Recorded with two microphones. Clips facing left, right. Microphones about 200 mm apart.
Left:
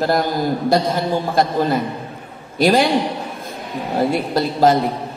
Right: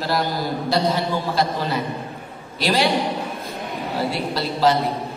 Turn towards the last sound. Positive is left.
turn(degrees=50)  # may be behind; listen again after turning